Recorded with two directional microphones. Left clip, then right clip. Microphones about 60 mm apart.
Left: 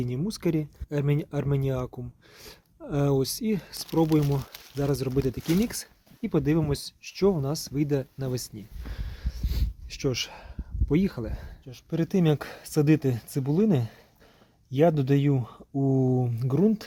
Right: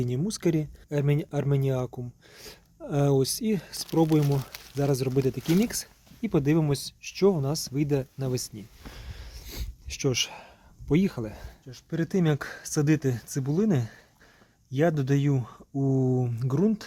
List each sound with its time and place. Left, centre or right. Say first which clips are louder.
0.0 s speech: right 2 dB; right
7.0 s speech: right 1 dB; right
8.9 s a sound: left 1 dB; right
11.9 s speech: left 2 dB; left
14.9 s speech: left 2 dB; centre